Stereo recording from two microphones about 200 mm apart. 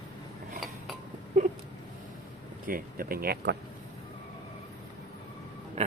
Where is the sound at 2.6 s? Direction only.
45° right (ahead or behind).